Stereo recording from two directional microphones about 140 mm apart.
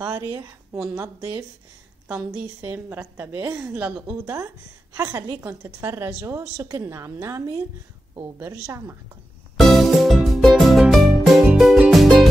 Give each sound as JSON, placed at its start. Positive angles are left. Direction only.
{"t": 0.1, "sound": "a woman's voice", "side_deg": -20}
{"t": 2.0, "sound": "a woman's voice", "side_deg": -15}
{"t": 8.6, "sound": "a woman's voice", "side_deg": -20}
{"t": 9.6, "sound": "music", "side_deg": 0}